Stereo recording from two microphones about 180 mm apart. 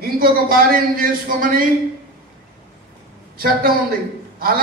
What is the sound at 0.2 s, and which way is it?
A man's voice, 55° right (ahead or behind).